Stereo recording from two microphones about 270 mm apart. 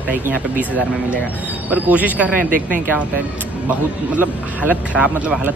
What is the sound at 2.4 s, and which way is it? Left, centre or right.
Speech, right.